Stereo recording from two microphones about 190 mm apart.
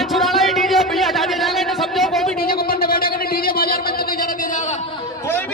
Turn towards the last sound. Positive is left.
turn(degrees=15)  # may be behind; listen again after turning